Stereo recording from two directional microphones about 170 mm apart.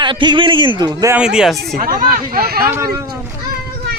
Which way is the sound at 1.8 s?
60° right (ahead or behind).